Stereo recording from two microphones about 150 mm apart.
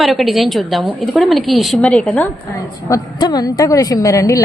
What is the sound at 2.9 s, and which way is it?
A woman's voice, 25° left (ahead or behind).